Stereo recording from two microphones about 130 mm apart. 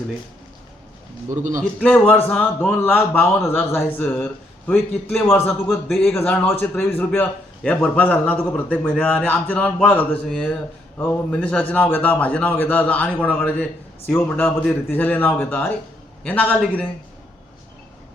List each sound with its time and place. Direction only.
1.8 s a man's voice: 10° left (ahead or behind)
10.2 s a man's voice: 5° left (ahead or behind)